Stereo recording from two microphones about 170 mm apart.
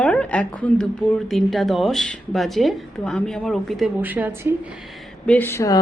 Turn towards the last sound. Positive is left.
turn(degrees=15)  # may be behind; listen again after turning